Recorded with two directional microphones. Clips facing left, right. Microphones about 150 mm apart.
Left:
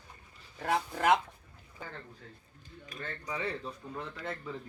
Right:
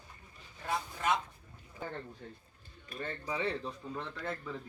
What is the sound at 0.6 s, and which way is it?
Speech, 70° left (ahead or behind).